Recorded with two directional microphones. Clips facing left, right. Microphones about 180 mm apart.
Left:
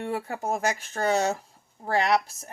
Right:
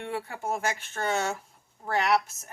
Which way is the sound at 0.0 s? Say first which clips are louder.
Left 3 dB; 40° left (ahead or behind).